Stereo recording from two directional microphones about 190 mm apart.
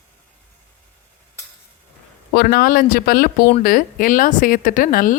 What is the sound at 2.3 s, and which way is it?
Speech, 50° left (ahead or behind).